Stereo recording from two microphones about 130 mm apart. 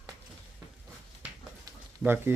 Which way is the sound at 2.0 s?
15° right (ahead or behind).